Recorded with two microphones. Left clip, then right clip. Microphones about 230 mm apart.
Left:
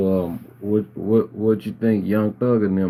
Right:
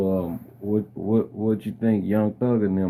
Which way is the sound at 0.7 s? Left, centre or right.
Centre.